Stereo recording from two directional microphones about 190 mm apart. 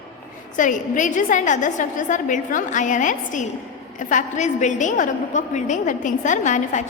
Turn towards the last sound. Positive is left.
turn(degrees=40)  # may be behind; listen again after turning